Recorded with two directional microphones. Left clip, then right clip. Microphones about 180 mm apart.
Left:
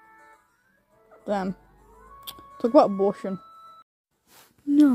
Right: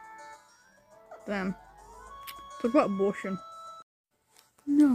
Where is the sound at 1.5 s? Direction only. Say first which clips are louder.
Left 1 dB; 30° right (ahead or behind).